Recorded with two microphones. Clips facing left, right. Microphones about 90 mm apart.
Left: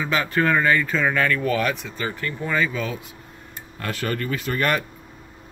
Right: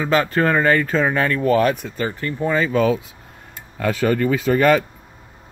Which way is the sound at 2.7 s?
75° right (ahead or behind).